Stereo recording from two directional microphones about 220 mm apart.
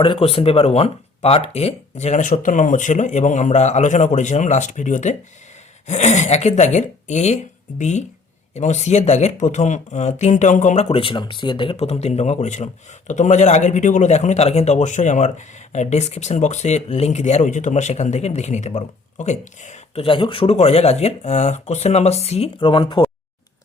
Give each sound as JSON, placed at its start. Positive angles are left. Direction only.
{"t": 0.0, "sound": "a man's voice", "side_deg": 25}